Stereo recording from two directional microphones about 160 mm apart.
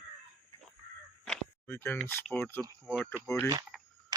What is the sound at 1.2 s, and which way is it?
Speech, 10° left (ahead or behind).